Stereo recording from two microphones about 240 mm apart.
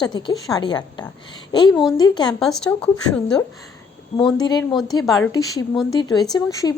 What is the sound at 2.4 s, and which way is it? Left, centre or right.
Speech, centre.